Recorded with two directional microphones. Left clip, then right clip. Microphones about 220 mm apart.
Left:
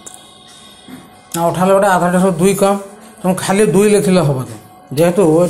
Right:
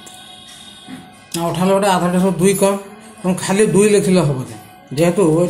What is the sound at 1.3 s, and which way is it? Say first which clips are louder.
Speech: left 4 dB; 5° left (ahead or behind).